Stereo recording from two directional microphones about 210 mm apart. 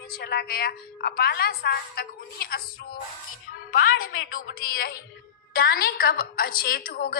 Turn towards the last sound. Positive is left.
turn(degrees=45)  # may be behind; listen again after turning